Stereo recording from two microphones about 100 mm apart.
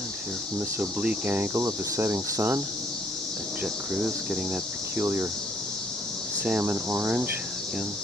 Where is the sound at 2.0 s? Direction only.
30° right (ahead or behind).